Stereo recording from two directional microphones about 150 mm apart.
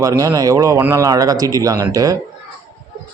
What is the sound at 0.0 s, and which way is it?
Speech, 20° right (ahead or behind).